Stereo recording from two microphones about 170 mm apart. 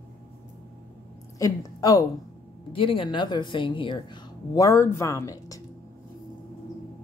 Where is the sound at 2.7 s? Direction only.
30° left (ahead or behind).